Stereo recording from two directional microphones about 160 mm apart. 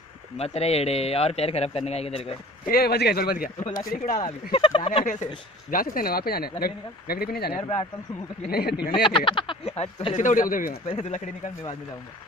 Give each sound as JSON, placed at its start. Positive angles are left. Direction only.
{"t": 0.4, "sound": "a man's voice", "side_deg": 40}
{"t": 2.6, "sound": "speech", "side_deg": 70}
{"t": 4.2, "sound": "a man's voice", "side_deg": 30}
{"t": 5.0, "sound": "speech", "side_deg": 50}
{"t": 5.7, "sound": "speech", "side_deg": 65}
{"t": 7.5, "sound": "a man's voice", "side_deg": 35}
{"t": 8.5, "sound": "speech", "side_deg": 80}
{"t": 9.0, "sound": "a man's voice", "side_deg": 35}
{"t": 10.9, "sound": "speech", "side_deg": 45}